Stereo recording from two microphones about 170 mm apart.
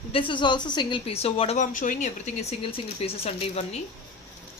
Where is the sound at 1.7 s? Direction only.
50° left (ahead or behind).